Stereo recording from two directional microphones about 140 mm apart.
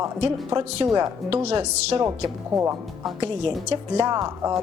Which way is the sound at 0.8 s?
35° right (ahead or behind).